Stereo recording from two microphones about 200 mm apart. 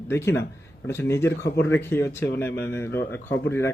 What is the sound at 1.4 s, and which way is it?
Speech, 55° left (ahead or behind).